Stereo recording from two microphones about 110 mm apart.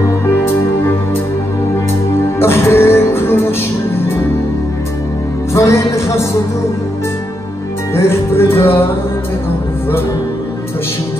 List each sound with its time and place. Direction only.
0.0 s music: 20° left (ahead or behind)
2.3 s music: 20° left (ahead or behind)
5.5 s music: 25° left (ahead or behind)
7.9 s music: 25° left (ahead or behind)